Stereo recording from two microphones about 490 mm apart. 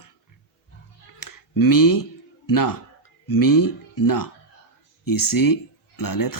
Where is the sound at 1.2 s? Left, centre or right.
Left.